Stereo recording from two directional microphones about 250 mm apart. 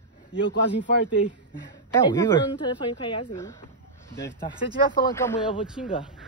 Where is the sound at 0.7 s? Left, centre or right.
Left.